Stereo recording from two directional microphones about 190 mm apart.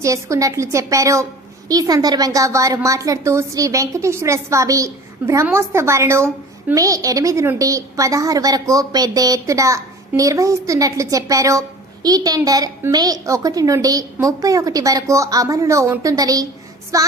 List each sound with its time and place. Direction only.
0.0 s a woman's voice: 15° right (ahead or behind)